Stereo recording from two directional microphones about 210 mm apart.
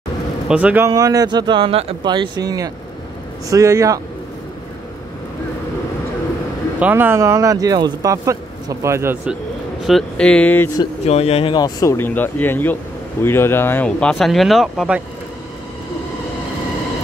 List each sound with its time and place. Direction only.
0.5 s speech: 5° right (ahead or behind)
0.8 s speech: 15° right (ahead or behind)
6.8 s speech: 10° right (ahead or behind); by 10.7 s 5° left (ahead or behind)
10.8 s speech: 30° left (ahead or behind); by 15.0 s centre (ahead or behind)